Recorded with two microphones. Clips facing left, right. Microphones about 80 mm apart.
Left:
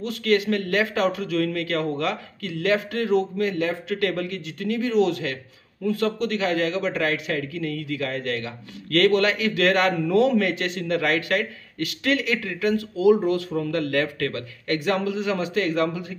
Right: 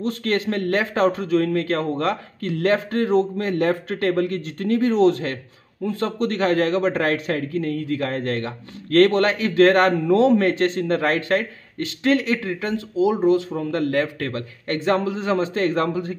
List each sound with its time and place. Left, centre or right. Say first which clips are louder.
0.0 s a man's voice: left 1 dB; right